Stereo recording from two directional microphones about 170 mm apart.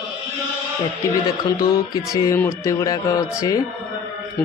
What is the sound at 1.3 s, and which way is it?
A man's voice, 20° left (ahead or behind).